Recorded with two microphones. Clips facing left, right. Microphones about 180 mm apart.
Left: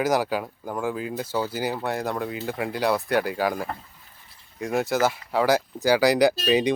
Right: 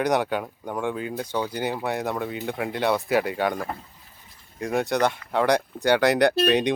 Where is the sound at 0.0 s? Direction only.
Centre (ahead or behind).